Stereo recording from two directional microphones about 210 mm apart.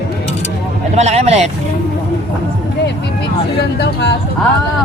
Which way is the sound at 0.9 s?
30° right (ahead or behind).